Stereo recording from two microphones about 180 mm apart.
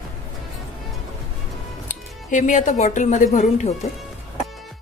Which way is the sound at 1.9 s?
45° left (ahead or behind).